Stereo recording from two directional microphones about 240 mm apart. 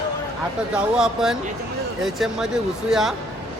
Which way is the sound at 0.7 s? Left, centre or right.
Centre.